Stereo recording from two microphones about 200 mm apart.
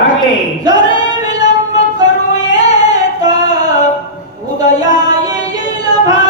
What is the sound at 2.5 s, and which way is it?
Singing, 20° right (ahead or behind).